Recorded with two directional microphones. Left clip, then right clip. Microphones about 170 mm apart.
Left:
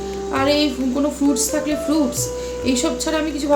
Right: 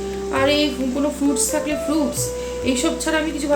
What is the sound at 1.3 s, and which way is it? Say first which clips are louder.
A woman's voice: left 1 dB; 15° left (ahead or behind).